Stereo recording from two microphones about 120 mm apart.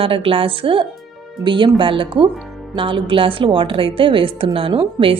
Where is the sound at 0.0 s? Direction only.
50° right (ahead or behind).